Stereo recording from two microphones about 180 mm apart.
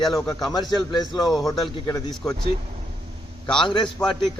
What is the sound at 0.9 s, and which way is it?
Speech, 25° left (ahead or behind).